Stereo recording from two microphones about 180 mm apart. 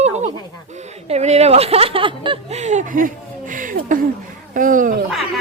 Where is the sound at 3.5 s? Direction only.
50° right (ahead or behind).